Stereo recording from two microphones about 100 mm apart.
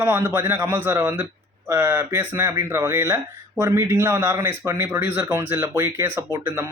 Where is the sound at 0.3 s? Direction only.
25° right (ahead or behind).